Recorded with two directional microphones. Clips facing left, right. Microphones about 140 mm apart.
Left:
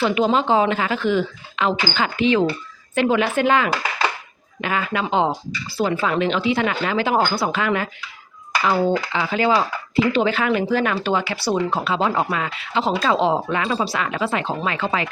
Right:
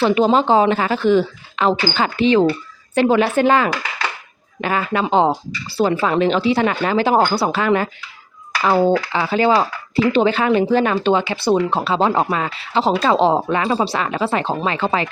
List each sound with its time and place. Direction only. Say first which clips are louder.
0.0 s speech: right 4 dB; 35° right (ahead or behind)